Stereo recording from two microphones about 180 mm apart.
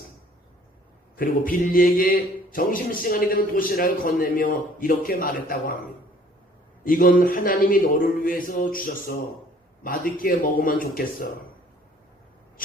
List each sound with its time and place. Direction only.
1.1 s a man's voice: 50° left (ahead or behind)
6.8 s a man's voice: 50° left (ahead or behind)